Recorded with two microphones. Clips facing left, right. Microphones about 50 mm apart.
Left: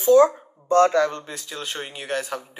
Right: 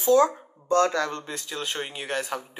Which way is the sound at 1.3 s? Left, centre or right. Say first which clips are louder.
Even; centre.